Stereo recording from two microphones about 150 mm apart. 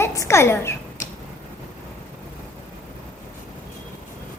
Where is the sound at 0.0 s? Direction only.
20° left (ahead or behind).